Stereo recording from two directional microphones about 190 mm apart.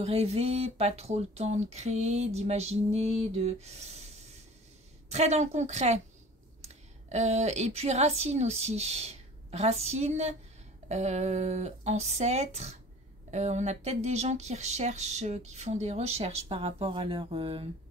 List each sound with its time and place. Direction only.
0.0 s speech: 35° right (ahead or behind)
5.1 s a woman's voice: 35° right (ahead or behind)